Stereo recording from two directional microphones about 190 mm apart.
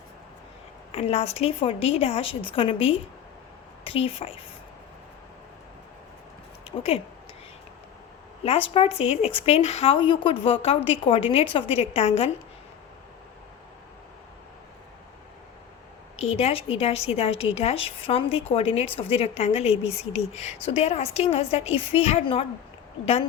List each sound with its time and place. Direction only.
0.9 s a woman's voice: 35° left (ahead or behind)
6.7 s speech: 30° left (ahead or behind)
8.7 s a woman's voice: 30° left (ahead or behind)
16.2 s a woman's voice: 35° left (ahead or behind)